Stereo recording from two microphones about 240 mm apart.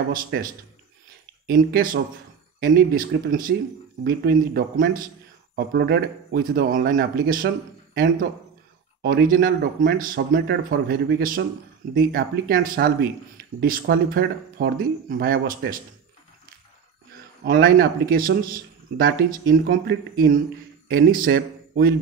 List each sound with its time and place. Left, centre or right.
0.1 s speech: right
1.5 s speech: right
17.4 s speech: right